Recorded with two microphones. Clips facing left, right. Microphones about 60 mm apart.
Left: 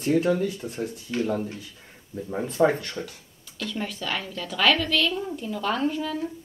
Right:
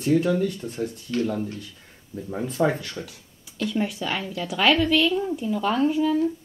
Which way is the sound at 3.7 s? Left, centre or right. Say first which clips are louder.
Right 4 dB; centre.